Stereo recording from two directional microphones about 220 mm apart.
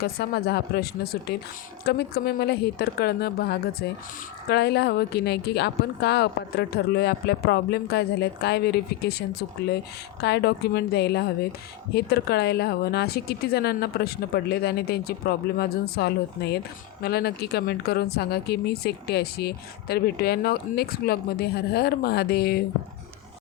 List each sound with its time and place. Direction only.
0.0 s speech: 45° left (ahead or behind)